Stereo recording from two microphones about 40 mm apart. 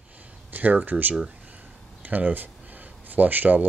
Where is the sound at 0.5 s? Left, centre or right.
Right.